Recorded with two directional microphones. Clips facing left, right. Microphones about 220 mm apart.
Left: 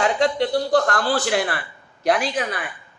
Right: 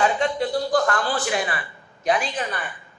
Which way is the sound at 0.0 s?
75° left (ahead or behind).